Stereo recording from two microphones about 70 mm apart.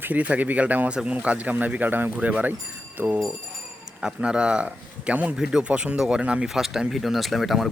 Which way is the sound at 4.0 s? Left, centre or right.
Centre.